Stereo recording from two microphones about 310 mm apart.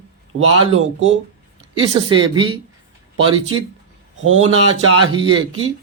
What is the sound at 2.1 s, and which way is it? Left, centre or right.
Speech, centre.